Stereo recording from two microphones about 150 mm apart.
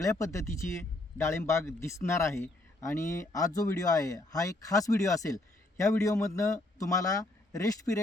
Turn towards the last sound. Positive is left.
turn(degrees=20)  # may be behind; listen again after turning